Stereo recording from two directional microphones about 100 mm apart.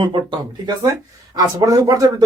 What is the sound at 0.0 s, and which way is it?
Speech, 50° right (ahead or behind).